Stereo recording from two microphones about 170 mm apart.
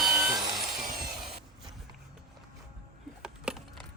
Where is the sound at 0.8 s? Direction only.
60° right (ahead or behind).